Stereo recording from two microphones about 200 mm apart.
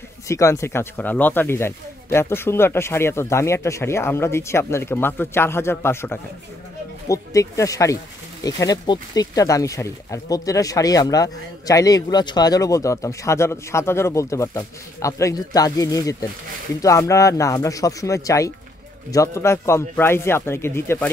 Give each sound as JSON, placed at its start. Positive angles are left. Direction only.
{"t": 0.3, "sound": "speech", "side_deg": 15}